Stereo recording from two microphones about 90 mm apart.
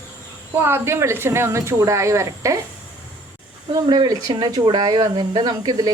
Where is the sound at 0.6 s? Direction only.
25° right (ahead or behind).